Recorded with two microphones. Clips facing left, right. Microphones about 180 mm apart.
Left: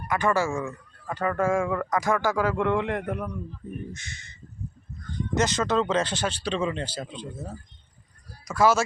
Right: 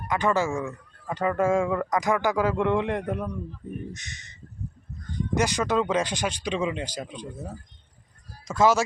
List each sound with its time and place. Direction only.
0.1 s a man's voice: 20° right (ahead or behind)